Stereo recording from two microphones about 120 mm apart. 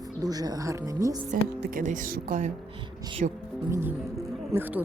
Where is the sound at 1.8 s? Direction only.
90° right.